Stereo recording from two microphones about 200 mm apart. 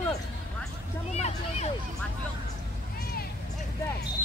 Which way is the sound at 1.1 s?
35° left (ahead or behind).